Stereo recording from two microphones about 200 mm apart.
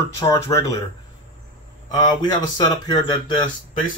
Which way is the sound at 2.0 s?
20° left (ahead or behind).